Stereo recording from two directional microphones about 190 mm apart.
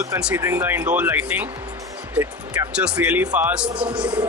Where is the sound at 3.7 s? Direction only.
25° right (ahead or behind).